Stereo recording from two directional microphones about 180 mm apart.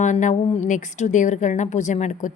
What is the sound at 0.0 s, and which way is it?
A woman's voice, 45° left (ahead or behind).